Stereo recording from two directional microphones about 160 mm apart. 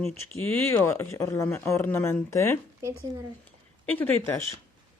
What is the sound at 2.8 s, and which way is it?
Speech, 20° right (ahead or behind).